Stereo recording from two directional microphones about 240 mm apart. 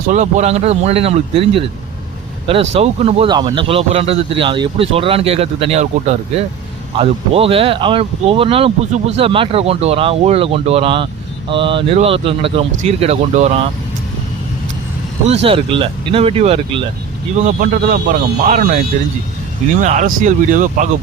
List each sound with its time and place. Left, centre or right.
0.1 s speech: right
15.4 s speech: right
19.8 s speech: right